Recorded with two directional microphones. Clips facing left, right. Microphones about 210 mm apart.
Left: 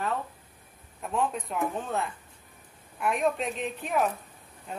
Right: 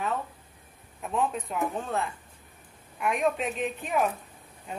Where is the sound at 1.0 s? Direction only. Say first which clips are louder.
Right 1 dB; centre (ahead or behind).